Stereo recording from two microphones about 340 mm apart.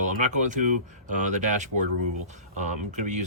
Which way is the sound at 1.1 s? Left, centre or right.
Right.